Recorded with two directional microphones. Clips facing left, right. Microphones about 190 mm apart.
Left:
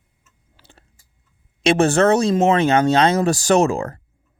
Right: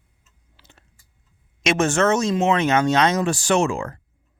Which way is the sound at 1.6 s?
30° left (ahead or behind).